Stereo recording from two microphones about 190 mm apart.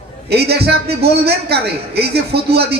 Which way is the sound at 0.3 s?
60° right (ahead or behind).